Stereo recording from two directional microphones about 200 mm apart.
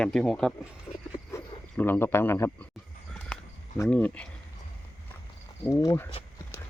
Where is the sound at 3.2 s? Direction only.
5° left (ahead or behind).